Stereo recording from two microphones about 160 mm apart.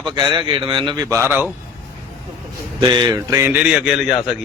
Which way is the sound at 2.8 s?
25° right (ahead or behind).